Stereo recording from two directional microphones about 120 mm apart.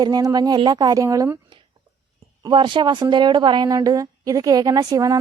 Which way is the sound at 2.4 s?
40° right (ahead or behind).